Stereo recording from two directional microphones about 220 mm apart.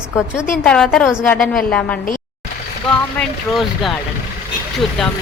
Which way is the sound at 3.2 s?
Centre (ahead or behind).